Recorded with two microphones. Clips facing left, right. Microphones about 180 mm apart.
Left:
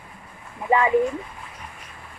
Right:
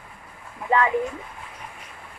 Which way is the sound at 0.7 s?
10° left (ahead or behind).